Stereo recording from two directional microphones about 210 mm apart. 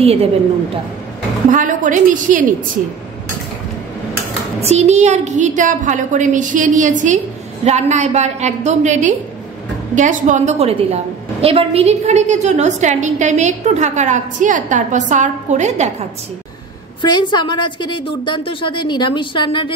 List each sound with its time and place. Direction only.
0.0 s a woman's voice: 30° right (ahead or behind)
1.5 s a woman's voice: 40° right (ahead or behind)
4.6 s a woman's voice: 30° right (ahead or behind)
17.0 s a woman's voice: 20° left (ahead or behind)